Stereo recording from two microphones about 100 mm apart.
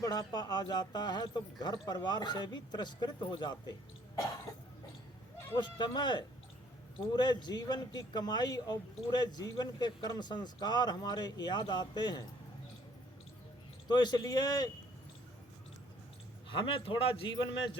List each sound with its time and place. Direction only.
0.0 s speech: 40° left (ahead or behind)
5.5 s speech: 50° left (ahead or behind)
13.8 s speech: 45° left (ahead or behind)
16.5 s a man's voice: 60° left (ahead or behind)